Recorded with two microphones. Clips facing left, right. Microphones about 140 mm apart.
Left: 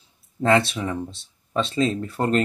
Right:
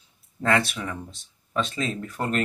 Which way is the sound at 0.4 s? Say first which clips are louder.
Left 4 dB; 25° left (ahead or behind).